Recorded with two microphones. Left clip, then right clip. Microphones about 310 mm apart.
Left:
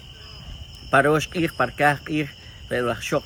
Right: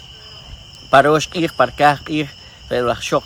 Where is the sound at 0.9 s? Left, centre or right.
Centre.